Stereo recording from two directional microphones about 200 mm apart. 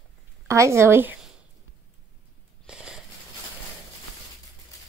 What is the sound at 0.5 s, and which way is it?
Speech, 15° right (ahead or behind).